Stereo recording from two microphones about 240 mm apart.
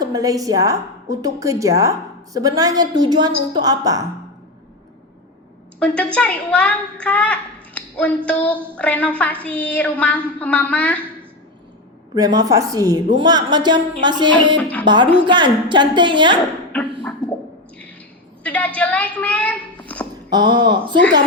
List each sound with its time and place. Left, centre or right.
0.0 s a woman's voice: centre
5.8 s a woman's voice: centre
12.1 s a woman's voice: centre
14.6 s a woman's voice: centre
14.8 s a woman's voice: centre
16.7 s a sound: centre
18.4 s a woman's voice: centre
20.3 s a woman's voice: centre